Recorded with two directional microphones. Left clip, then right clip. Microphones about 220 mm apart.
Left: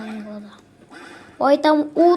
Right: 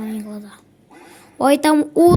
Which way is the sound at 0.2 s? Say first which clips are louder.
Right 2 dB; 55° right (ahead or behind).